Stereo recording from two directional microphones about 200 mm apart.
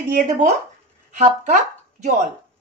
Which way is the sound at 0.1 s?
40° right (ahead or behind).